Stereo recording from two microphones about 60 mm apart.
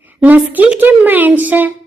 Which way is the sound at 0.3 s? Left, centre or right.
Right.